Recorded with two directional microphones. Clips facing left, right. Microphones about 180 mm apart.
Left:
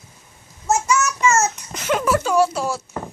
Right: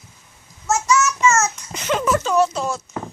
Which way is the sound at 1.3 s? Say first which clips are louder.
Left 1 dB; 35° left (ahead or behind).